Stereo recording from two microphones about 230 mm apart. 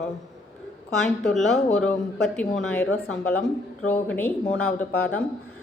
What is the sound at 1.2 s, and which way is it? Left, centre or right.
A woman's voice, centre.